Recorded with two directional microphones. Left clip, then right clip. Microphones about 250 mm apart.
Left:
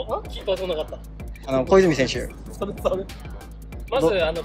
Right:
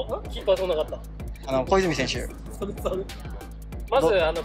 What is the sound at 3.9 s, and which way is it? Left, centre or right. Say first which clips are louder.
Speech: even; centre.